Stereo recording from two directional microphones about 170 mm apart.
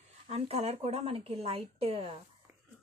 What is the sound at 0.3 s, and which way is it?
A woman's voice, 35° right (ahead or behind).